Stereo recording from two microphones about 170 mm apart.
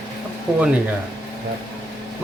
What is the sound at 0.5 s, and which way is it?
Speech, 5° right (ahead or behind).